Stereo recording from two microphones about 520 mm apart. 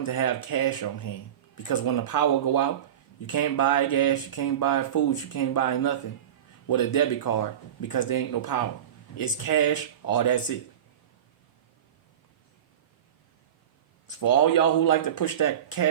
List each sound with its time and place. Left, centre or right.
0.0 s speech: left
14.2 s speech: left